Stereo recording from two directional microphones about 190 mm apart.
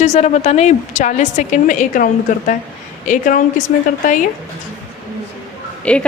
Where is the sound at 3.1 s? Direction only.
45° left (ahead or behind).